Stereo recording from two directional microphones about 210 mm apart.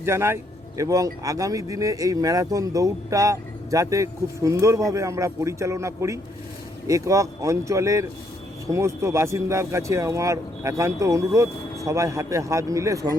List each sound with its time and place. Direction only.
0.0 s speech: 10° right (ahead or behind)